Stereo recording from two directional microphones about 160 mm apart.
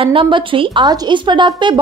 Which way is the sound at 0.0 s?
35° right (ahead or behind).